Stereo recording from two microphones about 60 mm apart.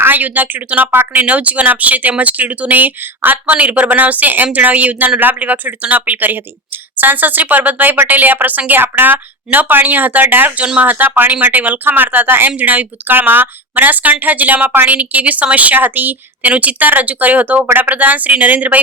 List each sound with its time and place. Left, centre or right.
0.0 s speech: right
1.2 s speech: right